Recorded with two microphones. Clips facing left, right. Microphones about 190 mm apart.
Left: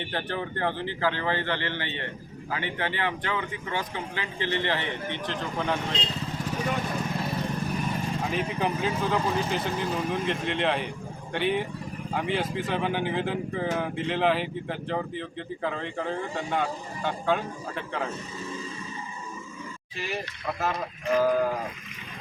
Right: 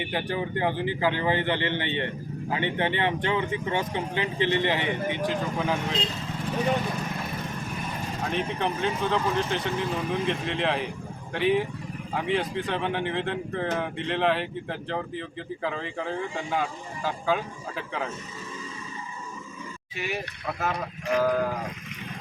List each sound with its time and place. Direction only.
0.0 s speech: 10° right (ahead or behind)
8.2 s speech: 5° left (ahead or behind)
20.0 s speech: centre (ahead or behind)